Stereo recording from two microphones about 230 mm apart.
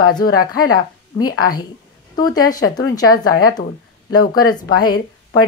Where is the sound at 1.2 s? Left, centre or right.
Left.